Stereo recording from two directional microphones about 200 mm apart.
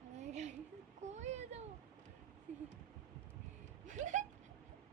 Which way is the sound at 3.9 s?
35° right (ahead or behind).